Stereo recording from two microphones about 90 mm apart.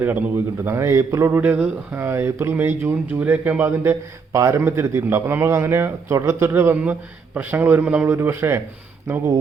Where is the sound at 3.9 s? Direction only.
35° right (ahead or behind).